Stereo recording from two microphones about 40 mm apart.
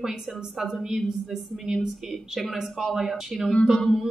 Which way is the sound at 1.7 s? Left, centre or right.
Centre.